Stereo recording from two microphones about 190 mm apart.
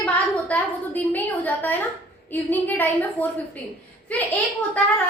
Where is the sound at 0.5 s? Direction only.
10° left (ahead or behind).